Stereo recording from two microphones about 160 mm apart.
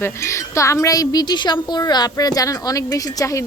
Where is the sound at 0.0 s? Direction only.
15° left (ahead or behind).